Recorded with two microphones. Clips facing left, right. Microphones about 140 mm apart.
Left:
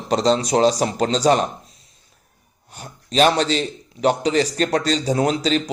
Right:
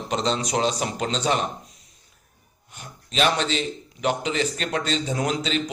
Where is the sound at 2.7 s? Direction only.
35° left (ahead or behind).